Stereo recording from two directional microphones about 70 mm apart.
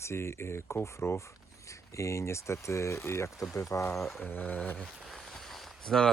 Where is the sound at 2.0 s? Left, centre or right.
Left.